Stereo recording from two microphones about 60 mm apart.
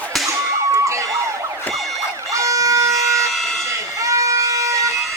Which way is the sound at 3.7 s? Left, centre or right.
Right.